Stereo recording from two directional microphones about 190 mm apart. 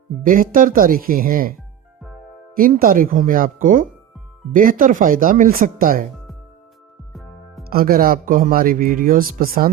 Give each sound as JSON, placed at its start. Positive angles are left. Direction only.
{"t": 0.2, "sound": "speech", "side_deg": -45}
{"t": 2.6, "sound": "speech", "side_deg": -50}
{"t": 7.1, "sound": "music", "side_deg": 0}
{"t": 7.6, "sound": "speech", "side_deg": -50}